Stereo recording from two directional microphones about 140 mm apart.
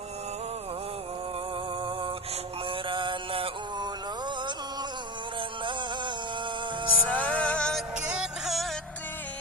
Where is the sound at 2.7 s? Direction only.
35° right (ahead or behind).